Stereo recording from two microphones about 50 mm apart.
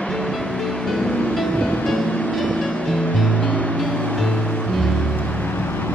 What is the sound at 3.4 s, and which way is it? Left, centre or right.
Music, left.